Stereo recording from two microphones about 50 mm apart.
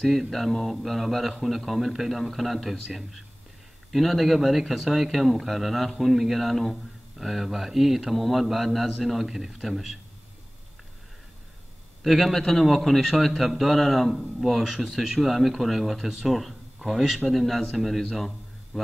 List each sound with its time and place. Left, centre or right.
0.0 s speech: centre
12.0 s speech: centre